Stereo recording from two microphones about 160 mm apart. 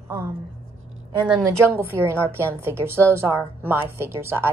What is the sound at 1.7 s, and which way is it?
A woman's voice, 15° right (ahead or behind).